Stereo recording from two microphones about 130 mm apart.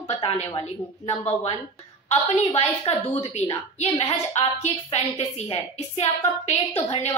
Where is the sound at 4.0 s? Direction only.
50° left (ahead or behind).